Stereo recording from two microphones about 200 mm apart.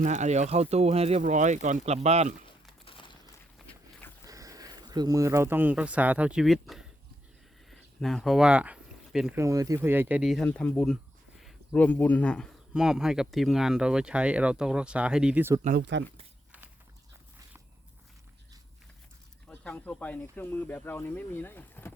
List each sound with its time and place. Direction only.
0.0 s speech: 35° right (ahead or behind)
2.8 s a sound: 25° left (ahead or behind)
4.3 s speech: 15° right (ahead or behind); by 6.8 s centre (ahead or behind)
7.7 s a sound: centre (ahead or behind)
9.4 s speech: 15° right (ahead or behind)
15.8 s speech: 60° right (ahead or behind)
19.5 s speech: 5° left (ahead or behind)